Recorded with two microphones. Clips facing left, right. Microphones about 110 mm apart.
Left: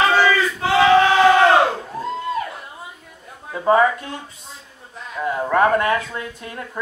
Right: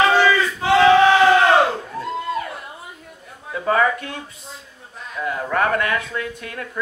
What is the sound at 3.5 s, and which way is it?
Speech, 20° left (ahead or behind).